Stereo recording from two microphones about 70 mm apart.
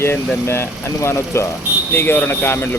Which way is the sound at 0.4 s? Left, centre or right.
Left.